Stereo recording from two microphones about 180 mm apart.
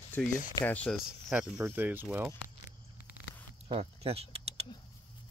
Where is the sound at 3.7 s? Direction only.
35° right (ahead or behind).